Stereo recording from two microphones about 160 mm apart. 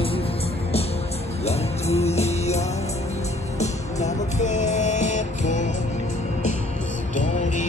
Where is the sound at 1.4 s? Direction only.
40° left (ahead or behind).